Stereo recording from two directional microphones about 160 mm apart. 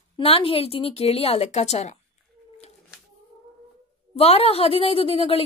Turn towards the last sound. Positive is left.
turn(degrees=35)  # may be behind; listen again after turning